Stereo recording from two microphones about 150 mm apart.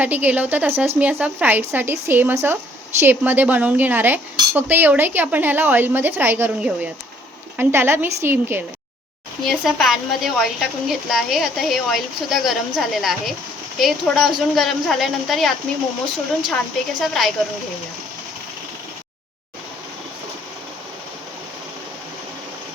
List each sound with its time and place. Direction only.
0.0 s speech: 10° right (ahead or behind)
9.5 s a woman's voice: centre (ahead or behind)
17.0 s a woman's voice: centre (ahead or behind)